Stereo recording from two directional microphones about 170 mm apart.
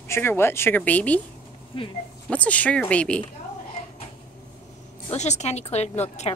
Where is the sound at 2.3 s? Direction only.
10° left (ahead or behind).